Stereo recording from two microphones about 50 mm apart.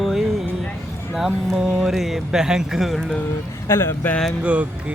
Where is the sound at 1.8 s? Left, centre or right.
Centre.